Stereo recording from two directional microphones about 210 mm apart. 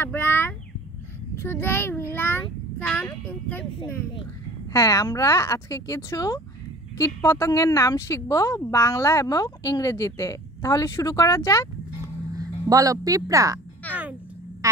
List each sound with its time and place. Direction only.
0.0 s a woman's voice: 10° left (ahead or behind)
12.4 s a woman's voice: 15° right (ahead or behind)
13.8 s a sound: 10° left (ahead or behind)